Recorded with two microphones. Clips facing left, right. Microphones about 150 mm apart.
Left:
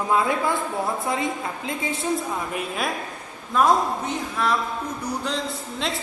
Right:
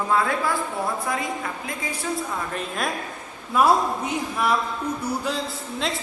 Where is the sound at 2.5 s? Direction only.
5° left (ahead or behind).